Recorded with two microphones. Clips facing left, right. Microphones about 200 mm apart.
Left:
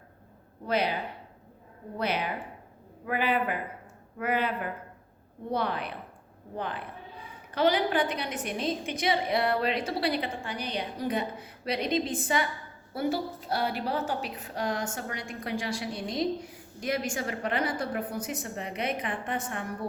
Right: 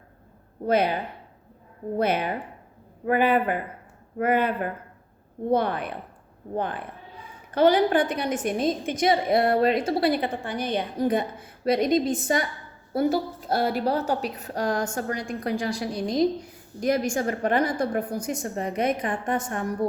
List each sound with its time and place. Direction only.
0.7 s a woman's voice: 50° right (ahead or behind)
2.0 s a woman's voice: 50° right (ahead or behind)